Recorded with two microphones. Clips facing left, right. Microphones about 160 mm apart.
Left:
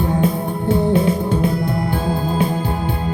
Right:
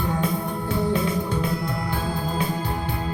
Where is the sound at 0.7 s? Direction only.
25° left (ahead or behind).